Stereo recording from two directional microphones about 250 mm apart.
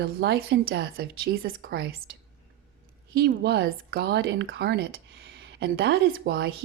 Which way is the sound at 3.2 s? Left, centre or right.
Right.